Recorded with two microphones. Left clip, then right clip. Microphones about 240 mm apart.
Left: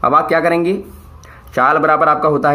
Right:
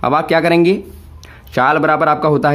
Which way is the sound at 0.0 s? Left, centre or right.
Right.